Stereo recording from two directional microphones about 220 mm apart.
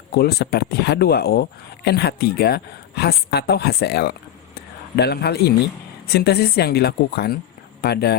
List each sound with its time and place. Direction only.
0.1 s speech: 45° left (ahead or behind)